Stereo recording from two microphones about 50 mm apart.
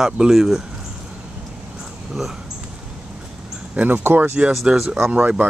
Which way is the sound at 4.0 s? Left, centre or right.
Right.